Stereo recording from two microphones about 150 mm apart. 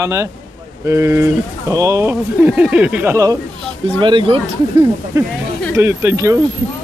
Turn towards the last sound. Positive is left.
turn(degrees=-20)  # may be behind; listen again after turning